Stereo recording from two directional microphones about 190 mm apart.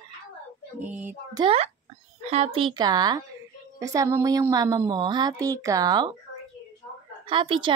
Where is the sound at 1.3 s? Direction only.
30° right (ahead or behind).